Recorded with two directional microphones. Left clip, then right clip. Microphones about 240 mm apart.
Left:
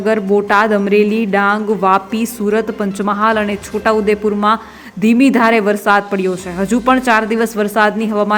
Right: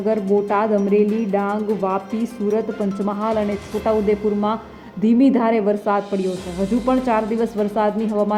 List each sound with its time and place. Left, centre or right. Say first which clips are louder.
0.0 s speech: left 5 dB; centre
3.0 s speech: left 8 dB; left
3.8 s speech: left 5 dB; centre